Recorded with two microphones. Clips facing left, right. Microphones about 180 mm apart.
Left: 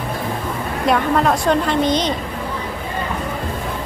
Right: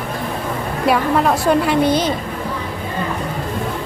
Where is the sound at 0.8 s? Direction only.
5° right (ahead or behind).